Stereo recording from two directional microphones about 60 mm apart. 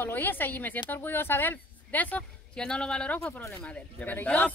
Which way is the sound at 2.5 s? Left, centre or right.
Centre.